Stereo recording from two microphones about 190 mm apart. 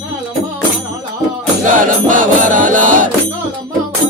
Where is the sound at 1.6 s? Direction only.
45° right (ahead or behind).